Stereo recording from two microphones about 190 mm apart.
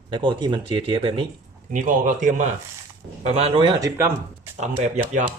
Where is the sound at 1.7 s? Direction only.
45° right (ahead or behind); by 3.9 s 25° right (ahead or behind).